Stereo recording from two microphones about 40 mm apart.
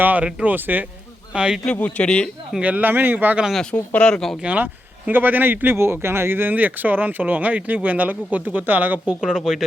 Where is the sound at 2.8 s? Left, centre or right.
Right.